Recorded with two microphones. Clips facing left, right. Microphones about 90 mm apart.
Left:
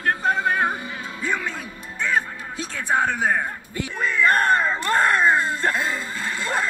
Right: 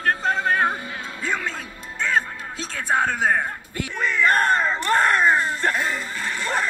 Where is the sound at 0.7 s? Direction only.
25° left (ahead or behind).